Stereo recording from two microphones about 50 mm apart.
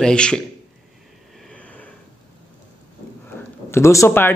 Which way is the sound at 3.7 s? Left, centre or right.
Left.